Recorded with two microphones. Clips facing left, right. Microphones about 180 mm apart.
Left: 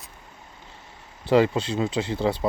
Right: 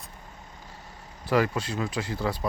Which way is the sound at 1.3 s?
25° left (ahead or behind).